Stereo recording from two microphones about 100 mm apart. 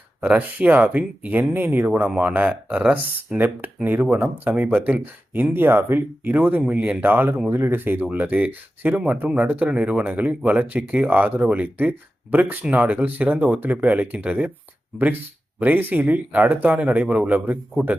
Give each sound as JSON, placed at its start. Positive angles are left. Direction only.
{"t": 0.2, "sound": "speech", "side_deg": -15}